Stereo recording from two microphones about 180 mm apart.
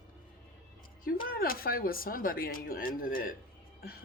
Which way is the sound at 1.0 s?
55° left (ahead or behind).